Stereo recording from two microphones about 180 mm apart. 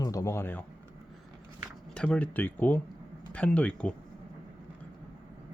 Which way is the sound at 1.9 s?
5° left (ahead or behind).